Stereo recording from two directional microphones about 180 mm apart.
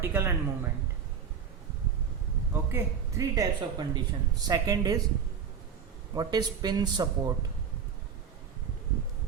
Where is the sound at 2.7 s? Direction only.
20° right (ahead or behind).